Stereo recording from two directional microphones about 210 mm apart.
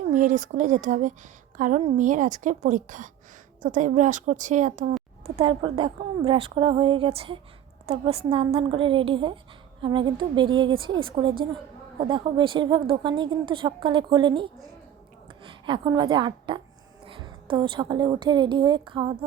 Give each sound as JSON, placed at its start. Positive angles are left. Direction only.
{"t": 0.1, "sound": "a woman's voice", "side_deg": -35}